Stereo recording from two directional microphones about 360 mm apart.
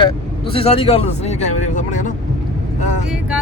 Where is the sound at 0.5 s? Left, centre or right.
Centre.